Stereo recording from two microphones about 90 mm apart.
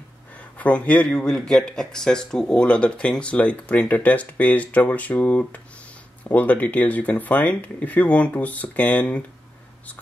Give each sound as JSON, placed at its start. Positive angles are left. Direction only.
{"t": 0.4, "sound": "speech", "side_deg": 15}